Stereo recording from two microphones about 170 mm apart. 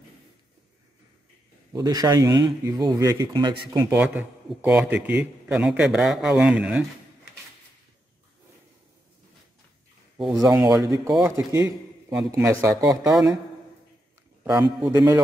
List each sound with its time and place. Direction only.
1.7 s speech: 20° right (ahead or behind)
3.7 s a man's voice: 10° right (ahead or behind)
10.3 s a man's voice: 20° right (ahead or behind)
14.4 s a man's voice: 10° right (ahead or behind)